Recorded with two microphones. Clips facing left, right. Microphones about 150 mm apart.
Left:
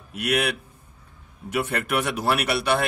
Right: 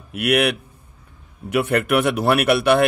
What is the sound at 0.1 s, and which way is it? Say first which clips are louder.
A man's voice: right 6 dB; 65° right (ahead or behind).